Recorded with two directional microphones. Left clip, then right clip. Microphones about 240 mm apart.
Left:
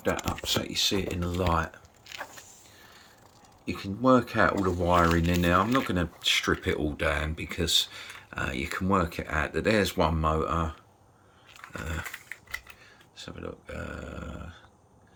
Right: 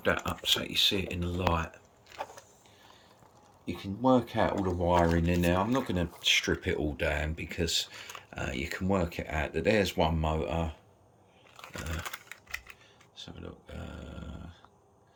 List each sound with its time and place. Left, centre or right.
0.0 s speech: centre
3.7 s speech: centre
4.6 s speech: left
5.2 s speech: centre
13.1 s speech: centre